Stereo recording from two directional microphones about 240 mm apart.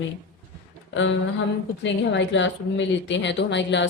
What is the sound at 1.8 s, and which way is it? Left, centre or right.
Speech, left.